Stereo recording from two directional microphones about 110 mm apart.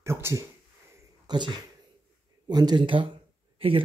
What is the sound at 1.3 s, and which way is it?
Speech, 45° right (ahead or behind).